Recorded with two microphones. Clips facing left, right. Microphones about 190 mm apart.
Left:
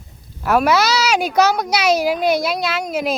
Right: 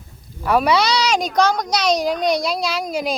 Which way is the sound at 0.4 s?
5° left (ahead or behind).